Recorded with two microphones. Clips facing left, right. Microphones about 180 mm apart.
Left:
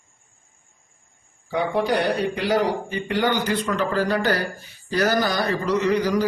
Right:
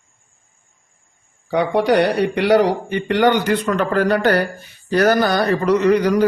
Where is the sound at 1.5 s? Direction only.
70° right (ahead or behind).